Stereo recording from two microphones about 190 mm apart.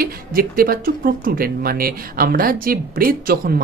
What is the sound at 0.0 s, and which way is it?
A man's voice, 50° right (ahead or behind).